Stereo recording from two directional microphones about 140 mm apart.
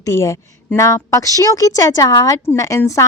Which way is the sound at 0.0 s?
20° left (ahead or behind).